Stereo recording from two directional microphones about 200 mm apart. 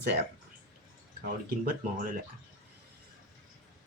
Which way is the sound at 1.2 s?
45° right (ahead or behind).